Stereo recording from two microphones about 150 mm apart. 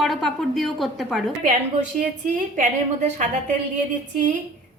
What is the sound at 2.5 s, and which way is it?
Speech, 55° right (ahead or behind).